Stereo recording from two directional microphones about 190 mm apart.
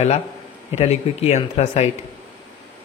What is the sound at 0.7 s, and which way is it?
Speech, 35° left (ahead or behind).